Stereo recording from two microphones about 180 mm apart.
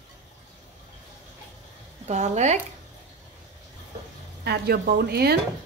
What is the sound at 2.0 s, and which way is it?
Speech, 40° right (ahead or behind).